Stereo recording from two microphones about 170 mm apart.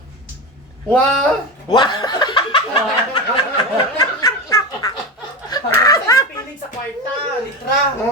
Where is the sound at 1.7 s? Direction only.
25° left (ahead or behind).